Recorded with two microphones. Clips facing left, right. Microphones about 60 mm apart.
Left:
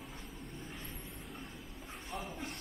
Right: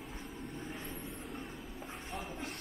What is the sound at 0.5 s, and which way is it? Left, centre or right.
Vehicle, right.